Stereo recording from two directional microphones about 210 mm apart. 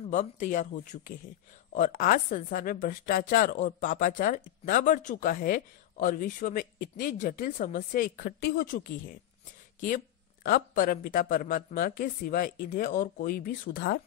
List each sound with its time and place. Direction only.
0.1 s a woman's voice: 35° left (ahead or behind)